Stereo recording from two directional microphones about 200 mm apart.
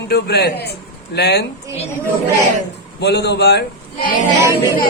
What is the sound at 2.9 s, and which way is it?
Speech, 55° left (ahead or behind).